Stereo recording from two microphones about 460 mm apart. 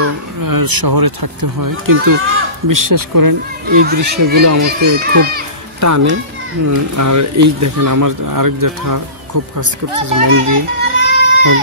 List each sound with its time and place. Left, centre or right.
0.4 s speech: right
3.6 s a child's voice: centre
4.4 s speech: right
4.6 s a child's voice: right
5.8 s speech: right
9.9 s speech: right